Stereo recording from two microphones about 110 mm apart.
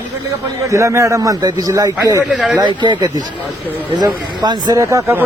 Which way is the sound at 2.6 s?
45° right (ahead or behind).